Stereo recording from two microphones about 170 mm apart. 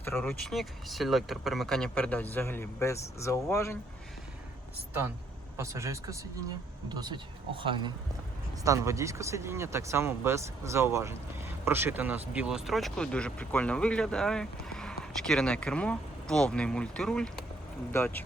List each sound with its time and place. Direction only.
0.0 s speech: 10° left (ahead or behind)
5.5 s speech: 15° right (ahead or behind)
8.6 s speech: 15° right (ahead or behind); by 18.2 s 15° left (ahead or behind)